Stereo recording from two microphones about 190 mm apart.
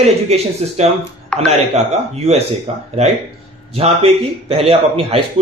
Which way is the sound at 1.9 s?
35° right (ahead or behind).